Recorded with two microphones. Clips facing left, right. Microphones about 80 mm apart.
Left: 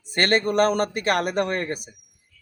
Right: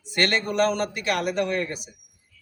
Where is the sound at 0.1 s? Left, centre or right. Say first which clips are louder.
Left 3 dB; left.